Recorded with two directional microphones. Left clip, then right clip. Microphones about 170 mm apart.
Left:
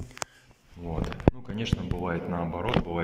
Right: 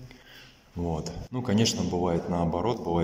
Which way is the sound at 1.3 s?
35° right (ahead or behind).